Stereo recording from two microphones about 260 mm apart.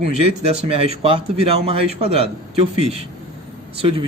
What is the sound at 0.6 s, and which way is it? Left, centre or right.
A man's voice, right.